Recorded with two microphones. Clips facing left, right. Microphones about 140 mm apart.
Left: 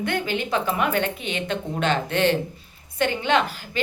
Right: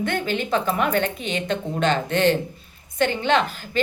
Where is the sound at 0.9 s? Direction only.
40° right (ahead or behind).